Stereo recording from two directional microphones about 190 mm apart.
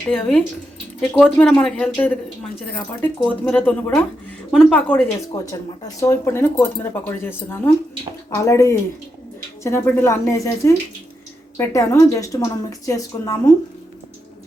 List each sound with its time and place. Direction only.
1.0 s a woman's voice: 5° left (ahead or behind)
5.3 s a woman's voice: 15° left (ahead or behind)